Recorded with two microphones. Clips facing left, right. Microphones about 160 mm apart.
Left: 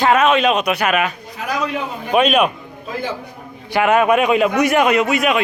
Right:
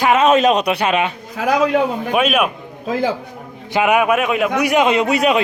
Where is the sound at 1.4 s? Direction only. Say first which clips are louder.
Right 7 dB; 90° right.